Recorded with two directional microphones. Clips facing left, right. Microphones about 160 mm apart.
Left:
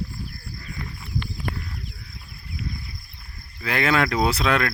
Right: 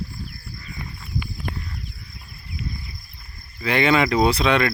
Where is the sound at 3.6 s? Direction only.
Centre (ahead or behind).